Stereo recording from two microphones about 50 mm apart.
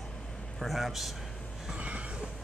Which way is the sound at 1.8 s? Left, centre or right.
Right.